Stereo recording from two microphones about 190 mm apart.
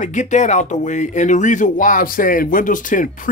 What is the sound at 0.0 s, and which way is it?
Speech, 40° left (ahead or behind).